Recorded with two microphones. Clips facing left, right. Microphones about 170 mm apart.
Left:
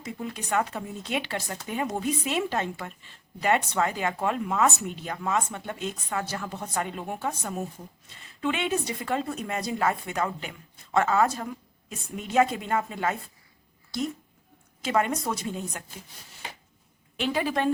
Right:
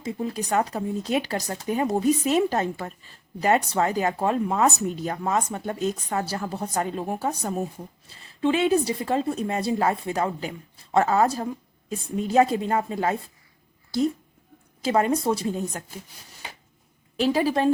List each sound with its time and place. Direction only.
0.0 s speech: 35° right (ahead or behind)
14.8 s speech: 35° right (ahead or behind)
17.2 s speech: 35° right (ahead or behind)